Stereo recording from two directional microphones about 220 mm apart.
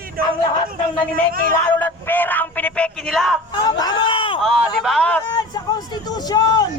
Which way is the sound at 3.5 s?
20° left (ahead or behind).